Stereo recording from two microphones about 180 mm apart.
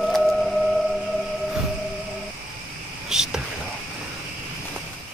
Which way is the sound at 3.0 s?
5° right (ahead or behind).